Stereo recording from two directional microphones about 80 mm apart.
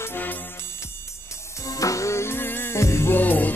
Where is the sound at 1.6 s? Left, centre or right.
Left.